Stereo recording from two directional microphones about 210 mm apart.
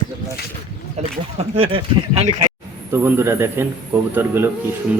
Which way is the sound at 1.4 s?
30° right (ahead or behind).